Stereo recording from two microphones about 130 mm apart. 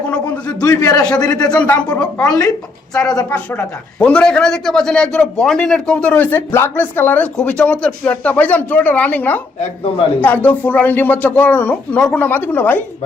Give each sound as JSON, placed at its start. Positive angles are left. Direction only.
{"t": 0.6, "sound": "a man's voice", "side_deg": 25}
{"t": 1.5, "sound": "a man's voice", "side_deg": 10}